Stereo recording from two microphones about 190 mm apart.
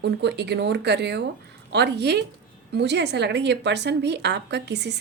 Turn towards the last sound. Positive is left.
turn(degrees=-60)  # may be behind; listen again after turning